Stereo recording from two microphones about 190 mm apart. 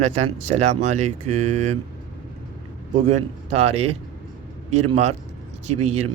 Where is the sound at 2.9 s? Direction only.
35° right (ahead or behind).